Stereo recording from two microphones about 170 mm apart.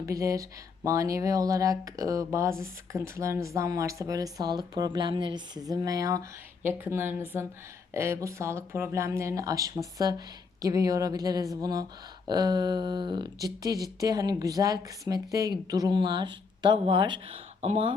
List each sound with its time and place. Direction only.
0.0 s speech: 20° right (ahead or behind); by 17.9 s 35° right (ahead or behind)